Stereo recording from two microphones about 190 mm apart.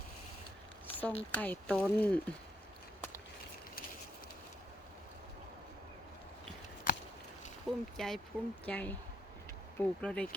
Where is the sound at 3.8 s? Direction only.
50° left (ahead or behind).